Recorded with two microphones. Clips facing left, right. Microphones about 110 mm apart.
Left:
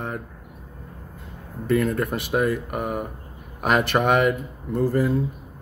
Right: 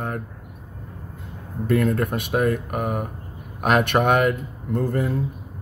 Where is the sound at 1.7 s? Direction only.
Centre (ahead or behind).